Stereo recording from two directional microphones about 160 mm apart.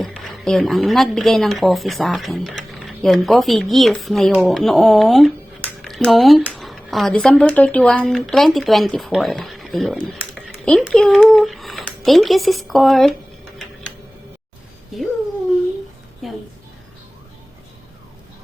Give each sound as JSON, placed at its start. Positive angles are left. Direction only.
{"t": 0.0, "sound": "a woman's voice", "side_deg": 0}
{"t": 16.2, "sound": "a woman's voice", "side_deg": 0}